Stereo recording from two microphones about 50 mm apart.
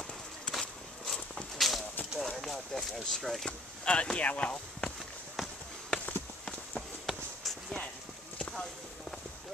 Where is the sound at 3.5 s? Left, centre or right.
Left.